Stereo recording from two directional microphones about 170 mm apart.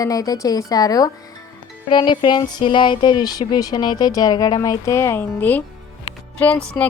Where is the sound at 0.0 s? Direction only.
20° left (ahead or behind).